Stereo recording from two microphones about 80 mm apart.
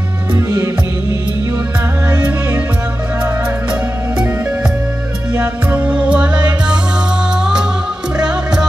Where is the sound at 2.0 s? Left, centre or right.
Centre.